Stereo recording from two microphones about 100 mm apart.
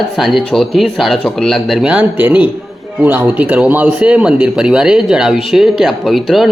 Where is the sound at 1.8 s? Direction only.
10° right (ahead or behind).